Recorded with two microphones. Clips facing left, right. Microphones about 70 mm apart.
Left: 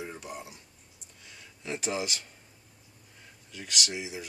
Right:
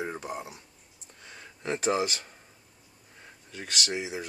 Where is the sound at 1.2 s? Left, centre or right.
Right.